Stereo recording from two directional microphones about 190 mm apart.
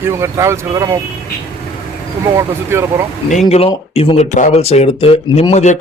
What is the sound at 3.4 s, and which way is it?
Speech, 30° left (ahead or behind).